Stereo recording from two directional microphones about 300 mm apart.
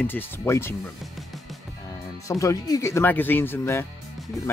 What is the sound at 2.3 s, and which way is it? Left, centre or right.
Speech, centre.